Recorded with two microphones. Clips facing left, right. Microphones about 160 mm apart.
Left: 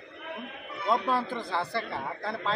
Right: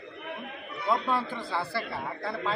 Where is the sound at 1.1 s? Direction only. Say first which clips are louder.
Left 1 dB; centre (ahead or behind).